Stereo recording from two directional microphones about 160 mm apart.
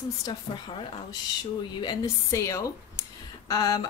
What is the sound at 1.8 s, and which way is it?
Speech, 25° left (ahead or behind).